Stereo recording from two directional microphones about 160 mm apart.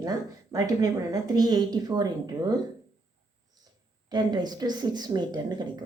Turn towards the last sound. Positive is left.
turn(degrees=-25)  # may be behind; listen again after turning